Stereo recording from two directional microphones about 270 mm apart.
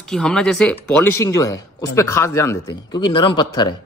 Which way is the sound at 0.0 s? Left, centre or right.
Centre.